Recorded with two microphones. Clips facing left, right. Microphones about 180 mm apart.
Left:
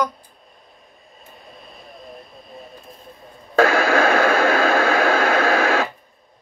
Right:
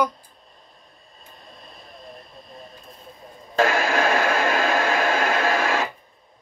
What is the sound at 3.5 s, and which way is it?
Radio, 65° left (ahead or behind).